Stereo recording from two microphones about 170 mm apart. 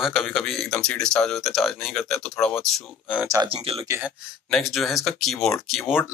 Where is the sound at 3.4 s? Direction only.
35° right (ahead or behind).